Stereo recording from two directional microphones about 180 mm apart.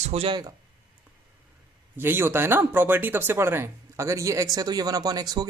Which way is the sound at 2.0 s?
10° right (ahead or behind).